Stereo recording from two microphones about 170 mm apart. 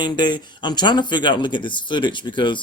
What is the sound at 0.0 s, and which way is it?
Speech, 25° left (ahead or behind).